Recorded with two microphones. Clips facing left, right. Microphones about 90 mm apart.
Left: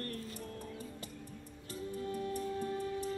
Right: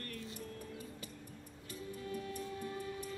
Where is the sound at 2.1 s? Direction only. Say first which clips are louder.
Left 5 dB; 35° left (ahead or behind).